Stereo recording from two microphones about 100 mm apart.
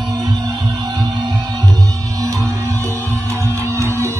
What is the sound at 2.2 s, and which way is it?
Music, 30° right (ahead or behind).